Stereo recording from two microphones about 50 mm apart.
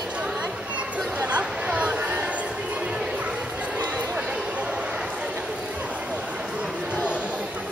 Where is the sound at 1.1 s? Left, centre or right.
Right.